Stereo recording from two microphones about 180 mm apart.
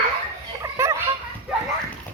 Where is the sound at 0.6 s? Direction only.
15° right (ahead or behind).